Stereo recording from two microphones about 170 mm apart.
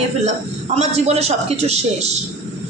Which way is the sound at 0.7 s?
40° right (ahead or behind).